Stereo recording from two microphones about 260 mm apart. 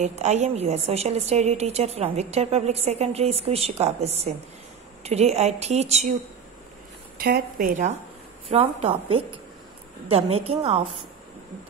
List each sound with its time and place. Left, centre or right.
0.0 s a woman's voice: right
7.2 s a woman's voice: right